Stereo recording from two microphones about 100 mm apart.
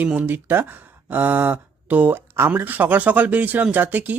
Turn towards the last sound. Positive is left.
turn(degrees=-15)  # may be behind; listen again after turning